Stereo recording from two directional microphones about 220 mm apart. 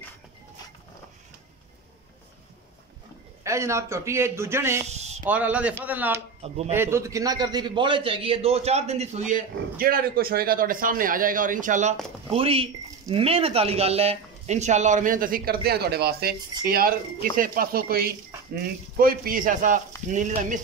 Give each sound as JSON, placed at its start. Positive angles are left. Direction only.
{"t": 3.4, "sound": "a man's voice", "side_deg": -15}
{"t": 4.8, "sound": "a sound", "side_deg": -30}
{"t": 5.3, "sound": "a man's voice", "side_deg": -5}
{"t": 6.4, "sound": "a man's voice", "side_deg": -30}
{"t": 6.7, "sound": "a man's voice", "side_deg": -10}